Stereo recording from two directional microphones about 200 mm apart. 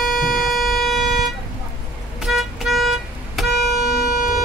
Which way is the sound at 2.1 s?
Centre (ahead or behind).